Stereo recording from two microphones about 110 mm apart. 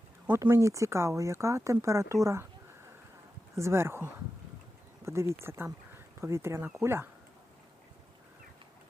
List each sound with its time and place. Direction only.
0.3 s speech: 20° right (ahead or behind)
3.5 s speech: 25° right (ahead or behind)